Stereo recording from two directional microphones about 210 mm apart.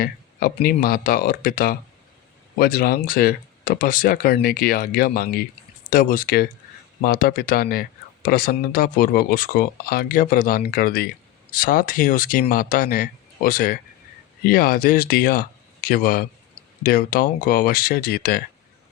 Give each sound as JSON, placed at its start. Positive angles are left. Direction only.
{"t": 0.0, "sound": "speech", "side_deg": 45}